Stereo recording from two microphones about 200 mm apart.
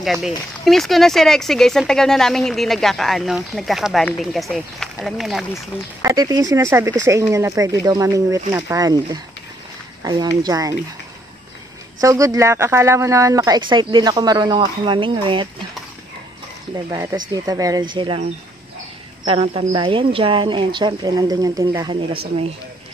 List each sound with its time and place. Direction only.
0.0 s speech: centre (ahead or behind)
6.0 s speech: 15° right (ahead or behind)
12.0 s speech: 15° right (ahead or behind)
16.7 s speech: 15° right (ahead or behind)
19.2 s speech: 25° right (ahead or behind)